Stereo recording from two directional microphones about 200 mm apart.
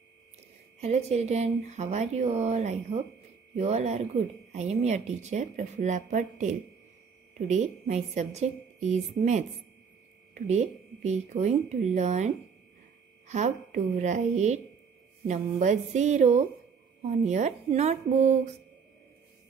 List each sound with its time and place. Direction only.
0.7 s speech: 30° right (ahead or behind)
13.3 s speech: 35° right (ahead or behind)